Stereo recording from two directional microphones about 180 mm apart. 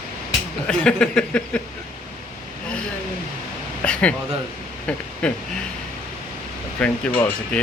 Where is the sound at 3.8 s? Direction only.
5° left (ahead or behind).